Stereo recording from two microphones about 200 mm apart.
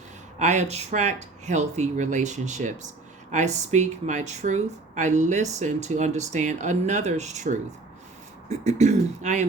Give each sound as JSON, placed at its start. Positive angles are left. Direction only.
{"t": 0.3, "sound": "speech", "side_deg": -35}